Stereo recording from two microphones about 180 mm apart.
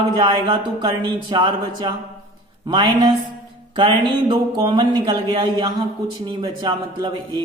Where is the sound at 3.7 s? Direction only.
25° right (ahead or behind).